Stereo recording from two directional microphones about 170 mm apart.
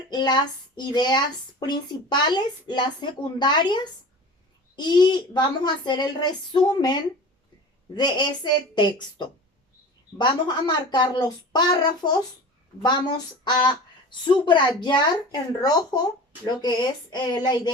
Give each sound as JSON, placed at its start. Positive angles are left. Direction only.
{"t": 0.1, "sound": "speech", "side_deg": 25}
{"t": 4.8, "sound": "speech", "side_deg": 25}
{"t": 13.4, "sound": "speech", "side_deg": 25}